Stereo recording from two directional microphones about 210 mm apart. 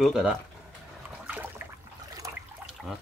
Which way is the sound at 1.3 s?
10° right (ahead or behind).